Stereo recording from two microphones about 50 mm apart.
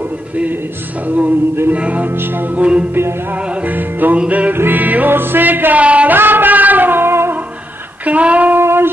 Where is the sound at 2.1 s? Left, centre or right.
Right.